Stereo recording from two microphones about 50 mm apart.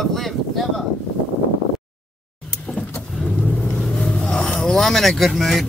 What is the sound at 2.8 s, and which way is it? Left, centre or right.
Vehicle, left.